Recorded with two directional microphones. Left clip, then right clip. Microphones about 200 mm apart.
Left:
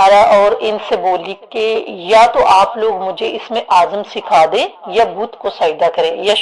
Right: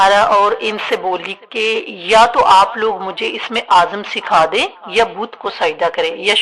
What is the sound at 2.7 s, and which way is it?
Speech, 10° right (ahead or behind).